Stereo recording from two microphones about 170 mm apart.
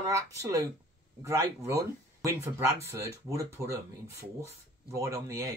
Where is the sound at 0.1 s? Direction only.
15° right (ahead or behind).